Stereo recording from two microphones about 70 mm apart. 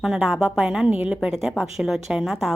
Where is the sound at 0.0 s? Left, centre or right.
Centre.